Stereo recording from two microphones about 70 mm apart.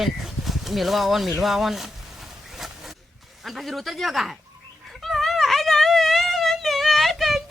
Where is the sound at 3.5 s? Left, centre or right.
Centre.